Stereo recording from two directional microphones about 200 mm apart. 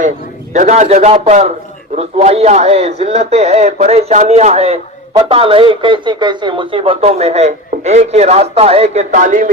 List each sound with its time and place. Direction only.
0.5 s a man's voice: 35° right (ahead or behind)